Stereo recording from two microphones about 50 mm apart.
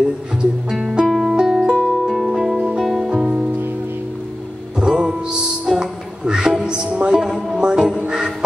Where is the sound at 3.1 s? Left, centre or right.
Right.